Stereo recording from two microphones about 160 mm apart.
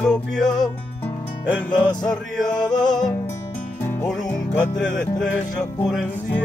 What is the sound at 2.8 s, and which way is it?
Music, 25° left (ahead or behind).